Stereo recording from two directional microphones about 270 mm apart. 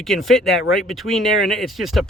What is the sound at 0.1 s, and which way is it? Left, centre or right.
Speech, centre.